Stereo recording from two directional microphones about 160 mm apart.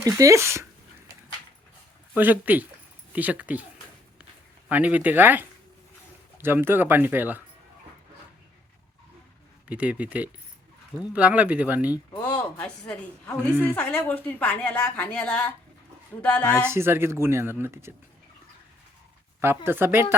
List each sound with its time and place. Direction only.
0.0 s speech: 20° right (ahead or behind)
2.1 s speech: 10° right (ahead or behind)
4.7 s speech: 10° right (ahead or behind)
9.6 s speech: 10° right (ahead or behind)
12.2 s a woman's voice: 10° left (ahead or behind)
13.5 s speech: 10° right (ahead or behind)
13.7 s a woman's voice: 10° left (ahead or behind)
16.6 s speech: 15° right (ahead or behind)
19.4 s speech: 15° right (ahead or behind)